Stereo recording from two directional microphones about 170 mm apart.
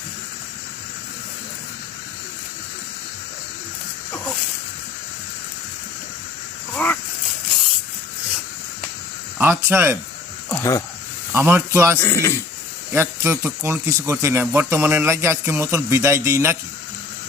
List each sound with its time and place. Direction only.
6.7 s a sound: 10° left (ahead or behind)
9.4 s a man's voice: 10° right (ahead or behind)
10.5 s speech: 20° left (ahead or behind)
11.3 s a man's voice: 15° right (ahead or behind)
11.9 s speech: 15° left (ahead or behind)
12.9 s a man's voice: 15° right (ahead or behind)